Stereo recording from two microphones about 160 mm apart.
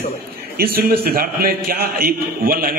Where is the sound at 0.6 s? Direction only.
75° right (ahead or behind).